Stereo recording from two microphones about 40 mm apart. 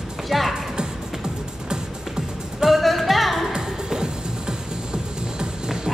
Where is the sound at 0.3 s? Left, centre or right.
Centre.